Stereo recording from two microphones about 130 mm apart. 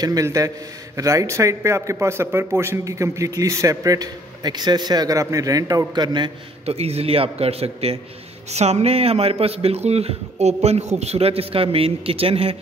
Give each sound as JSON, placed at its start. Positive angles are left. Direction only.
{"t": 0.0, "sound": "speech", "side_deg": -25}
{"t": 6.6, "sound": "a man's voice", "side_deg": -50}